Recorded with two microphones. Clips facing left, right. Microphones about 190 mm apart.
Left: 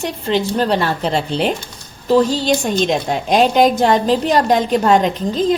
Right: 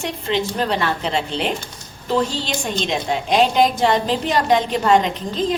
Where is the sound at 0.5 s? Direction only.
35° left (ahead or behind).